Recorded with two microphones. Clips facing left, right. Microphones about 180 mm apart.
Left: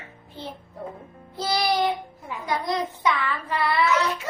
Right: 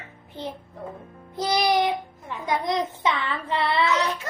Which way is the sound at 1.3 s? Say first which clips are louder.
Right 2 dB; 20° right (ahead or behind).